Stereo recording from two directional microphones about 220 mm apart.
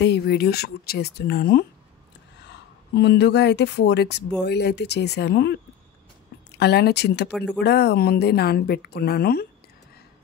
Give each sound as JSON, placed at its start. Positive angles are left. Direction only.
{"t": 0.0, "sound": "a woman's voice", "side_deg": 50}
{"t": 2.9, "sound": "a woman's voice", "side_deg": 50}
{"t": 6.6, "sound": "a woman's voice", "side_deg": 50}
{"t": 7.2, "sound": "speech", "side_deg": 0}
{"t": 7.5, "sound": "a woman's voice", "side_deg": 50}